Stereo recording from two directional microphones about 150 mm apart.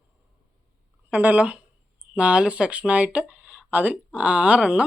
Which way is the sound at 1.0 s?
10° right (ahead or behind).